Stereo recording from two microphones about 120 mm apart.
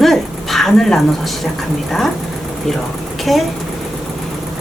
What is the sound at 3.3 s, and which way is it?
Speech, centre (ahead or behind).